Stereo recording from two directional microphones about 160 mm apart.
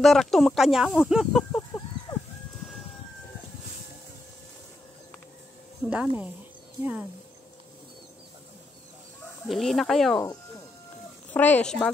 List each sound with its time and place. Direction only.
0.0 s speech: centre (ahead or behind)
1.5 s a sound: 20° left (ahead or behind)
5.9 s a woman's voice: 10° right (ahead or behind)
9.5 s speech: centre (ahead or behind)
11.2 s a woman's voice: 10° left (ahead or behind)